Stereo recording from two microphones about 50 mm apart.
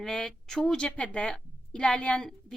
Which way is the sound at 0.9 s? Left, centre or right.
Left.